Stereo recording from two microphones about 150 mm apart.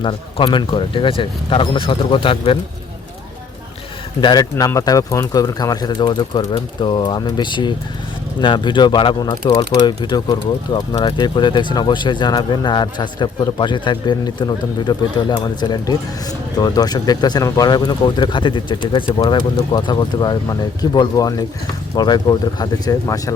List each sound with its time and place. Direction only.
0.0 s speech: 35° left (ahead or behind)
4.2 s speech: 25° left (ahead or behind)